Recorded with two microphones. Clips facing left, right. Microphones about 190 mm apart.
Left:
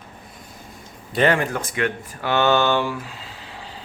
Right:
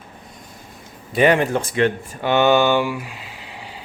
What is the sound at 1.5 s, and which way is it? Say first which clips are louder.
Speech: right 6 dB; 30° right (ahead or behind).